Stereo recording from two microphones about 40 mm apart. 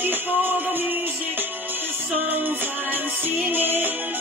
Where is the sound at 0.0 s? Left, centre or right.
Right.